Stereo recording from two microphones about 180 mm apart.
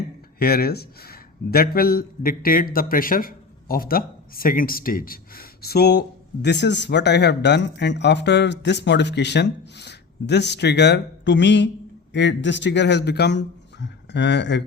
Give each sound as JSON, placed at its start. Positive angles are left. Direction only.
{"t": 0.3, "sound": "a man's voice", "side_deg": 60}